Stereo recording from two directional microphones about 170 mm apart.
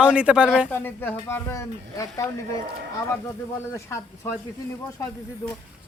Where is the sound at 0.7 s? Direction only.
10° left (ahead or behind).